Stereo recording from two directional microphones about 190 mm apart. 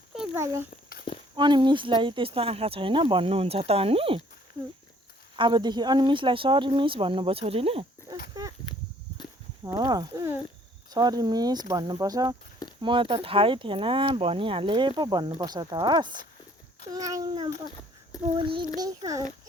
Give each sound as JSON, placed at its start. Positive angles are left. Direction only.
{"t": 0.3, "sound": "a child's voice", "side_deg": -15}
{"t": 5.4, "sound": "speech", "side_deg": -25}
{"t": 9.6, "sound": "a child's voice", "side_deg": -20}